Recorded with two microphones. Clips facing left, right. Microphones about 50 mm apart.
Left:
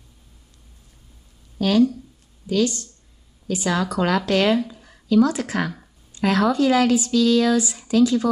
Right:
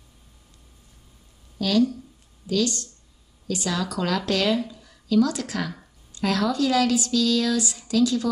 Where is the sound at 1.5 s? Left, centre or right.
Left.